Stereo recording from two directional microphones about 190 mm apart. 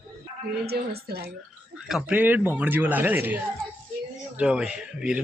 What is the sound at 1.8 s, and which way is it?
A man's voice, centre (ahead or behind).